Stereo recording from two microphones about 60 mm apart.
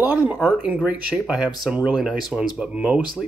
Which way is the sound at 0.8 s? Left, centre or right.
Centre.